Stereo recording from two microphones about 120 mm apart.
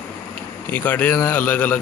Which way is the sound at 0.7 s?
15° left (ahead or behind).